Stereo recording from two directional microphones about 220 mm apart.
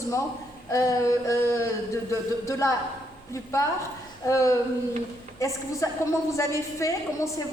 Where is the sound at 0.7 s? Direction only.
15° left (ahead or behind).